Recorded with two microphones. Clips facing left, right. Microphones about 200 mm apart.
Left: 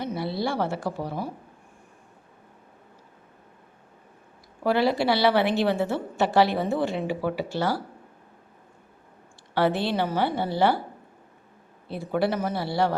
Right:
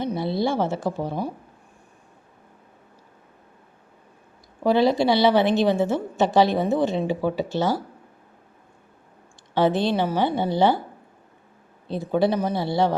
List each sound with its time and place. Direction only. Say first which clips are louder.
0.0 s a woman's voice: right 4 dB; 20° right (ahead or behind)
4.6 s a woman's voice: right 4 dB; 20° right (ahead or behind)
9.6 s a woman's voice: right 3 dB; 20° right (ahead or behind)
11.9 s a woman's voice: right 4 dB; 20° right (ahead or behind)